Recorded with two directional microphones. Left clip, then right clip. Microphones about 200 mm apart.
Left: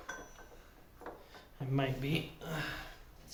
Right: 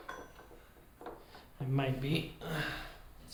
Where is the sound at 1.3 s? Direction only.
20° left (ahead or behind).